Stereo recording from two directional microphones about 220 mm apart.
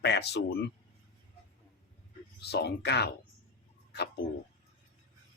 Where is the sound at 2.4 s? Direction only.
50° left (ahead or behind).